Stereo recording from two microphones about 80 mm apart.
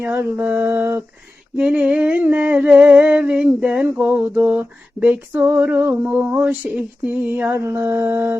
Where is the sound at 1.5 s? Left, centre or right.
Centre.